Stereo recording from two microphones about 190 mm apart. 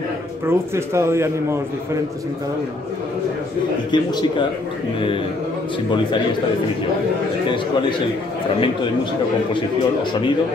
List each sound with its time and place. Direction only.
0.5 s a man's voice: 15° right (ahead or behind)
3.9 s a man's voice: 25° left (ahead or behind)